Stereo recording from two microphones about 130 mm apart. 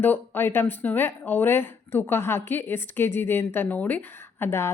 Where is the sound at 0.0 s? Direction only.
15° left (ahead or behind).